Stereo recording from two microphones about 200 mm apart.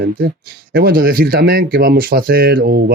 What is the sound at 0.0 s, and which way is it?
Speech, 50° right (ahead or behind).